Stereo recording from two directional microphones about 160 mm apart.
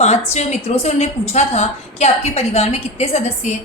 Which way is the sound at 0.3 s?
40° left (ahead or behind).